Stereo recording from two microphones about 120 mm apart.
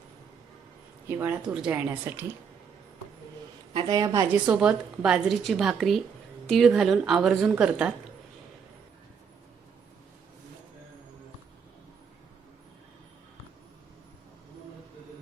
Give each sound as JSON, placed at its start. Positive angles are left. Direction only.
{"t": 1.0, "sound": "speech", "side_deg": -15}
{"t": 3.8, "sound": "a woman's voice", "side_deg": -30}
{"t": 4.3, "sound": "a woman's voice", "side_deg": -10}